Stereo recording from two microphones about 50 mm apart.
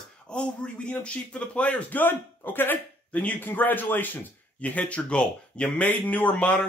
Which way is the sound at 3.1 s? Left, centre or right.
Left.